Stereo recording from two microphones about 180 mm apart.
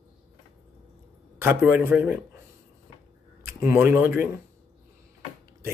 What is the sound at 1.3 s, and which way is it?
Speech, 10° right (ahead or behind).